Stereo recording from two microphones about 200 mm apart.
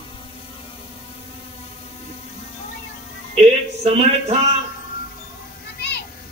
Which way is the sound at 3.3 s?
30° right (ahead or behind).